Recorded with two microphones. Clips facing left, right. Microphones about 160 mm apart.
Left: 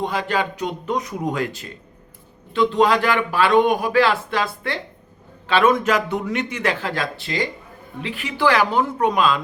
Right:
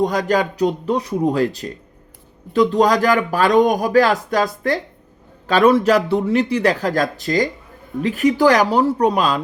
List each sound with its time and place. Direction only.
0.0 s speech: 40° right (ahead or behind)